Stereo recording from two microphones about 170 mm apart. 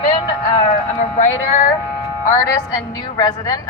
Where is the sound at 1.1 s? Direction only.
40° left (ahead or behind).